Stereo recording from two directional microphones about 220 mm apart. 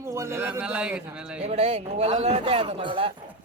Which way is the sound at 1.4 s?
30° right (ahead or behind).